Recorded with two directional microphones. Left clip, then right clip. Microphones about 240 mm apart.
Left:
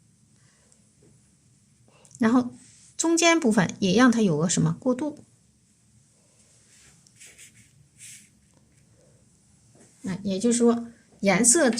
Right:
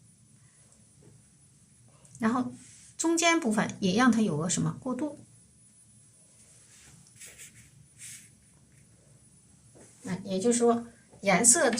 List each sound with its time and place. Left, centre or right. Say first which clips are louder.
2.1 s a woman's voice: left 6 dB; left
10.0 s a sound: left 3 dB; left
11.2 s speech: left 3 dB; left